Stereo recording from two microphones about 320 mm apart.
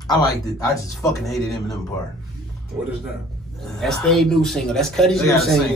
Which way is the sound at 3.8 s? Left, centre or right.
Centre.